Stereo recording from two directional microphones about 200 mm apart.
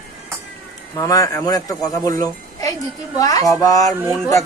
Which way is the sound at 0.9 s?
15° left (ahead or behind).